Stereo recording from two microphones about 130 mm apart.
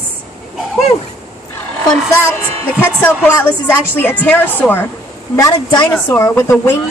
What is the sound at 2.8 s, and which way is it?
A woman's voice, 15° left (ahead or behind).